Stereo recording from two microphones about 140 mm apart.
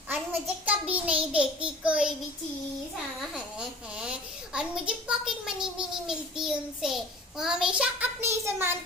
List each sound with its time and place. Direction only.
0.7 s a child's voice: 10° right (ahead or behind)
3.2 s a child's voice: 5° right (ahead or behind)